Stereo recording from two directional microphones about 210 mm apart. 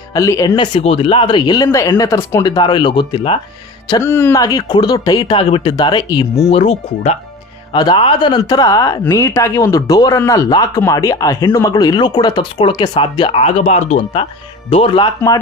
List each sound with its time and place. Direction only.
0.1 s speech: 15° left (ahead or behind)
0.7 s speech: 25° left (ahead or behind)
3.9 s speech: 10° left (ahead or behind)
6.5 s speech: 30° left (ahead or behind)